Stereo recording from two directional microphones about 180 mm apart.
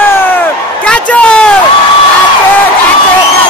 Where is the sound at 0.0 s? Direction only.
10° left (ahead or behind).